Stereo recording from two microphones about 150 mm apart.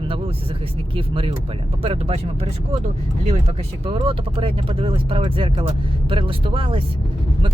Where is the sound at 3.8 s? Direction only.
40° right (ahead or behind).